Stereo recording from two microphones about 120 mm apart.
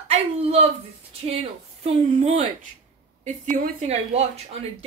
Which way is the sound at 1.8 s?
65° right (ahead or behind).